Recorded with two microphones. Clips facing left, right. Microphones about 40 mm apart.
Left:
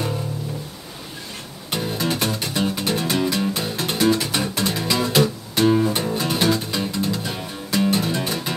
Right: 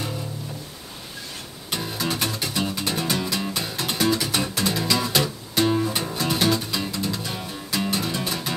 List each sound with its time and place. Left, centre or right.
1.7 s music: centre
4.0 s music: centre
6.1 s music: centre